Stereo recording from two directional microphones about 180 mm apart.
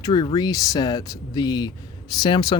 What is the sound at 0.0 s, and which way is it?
Speech, 25° left (ahead or behind).